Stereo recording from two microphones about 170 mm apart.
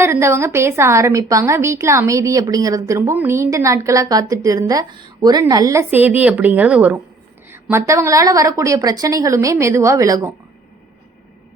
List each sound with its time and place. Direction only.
0.0 s a woman's voice: 15° right (ahead or behind)